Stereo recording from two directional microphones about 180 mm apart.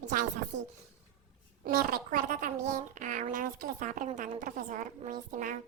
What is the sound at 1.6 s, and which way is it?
A child's voice, 55° right (ahead or behind).